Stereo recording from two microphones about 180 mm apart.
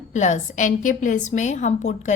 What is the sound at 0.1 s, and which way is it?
A woman's voice, 45° left (ahead or behind).